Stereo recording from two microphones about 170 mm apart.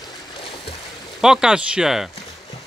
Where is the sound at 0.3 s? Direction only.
30° left (ahead or behind).